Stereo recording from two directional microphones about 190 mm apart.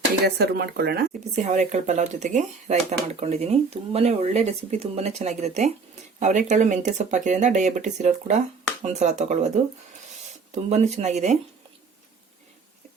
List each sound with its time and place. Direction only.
0.3 s speech: 55° right (ahead or behind)
1.4 s speech: 40° right (ahead or behind)
10.5 s speech: 35° right (ahead or behind)